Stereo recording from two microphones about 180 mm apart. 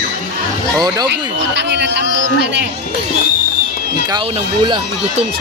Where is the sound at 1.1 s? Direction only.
75° right (ahead or behind).